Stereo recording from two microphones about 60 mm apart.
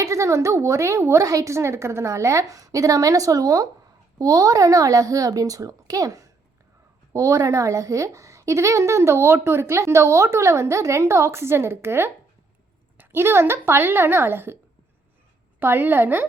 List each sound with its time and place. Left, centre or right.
0.0 s a woman's voice: right
13.1 s a child's voice: right
15.6 s a child's voice: right